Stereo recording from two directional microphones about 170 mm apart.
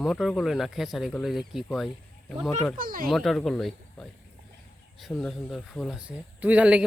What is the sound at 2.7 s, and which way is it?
Speech, 55° right (ahead or behind).